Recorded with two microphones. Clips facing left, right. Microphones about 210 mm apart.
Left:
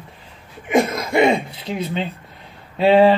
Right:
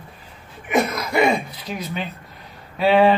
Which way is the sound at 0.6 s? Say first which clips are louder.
Left 3 dB; 25° left (ahead or behind).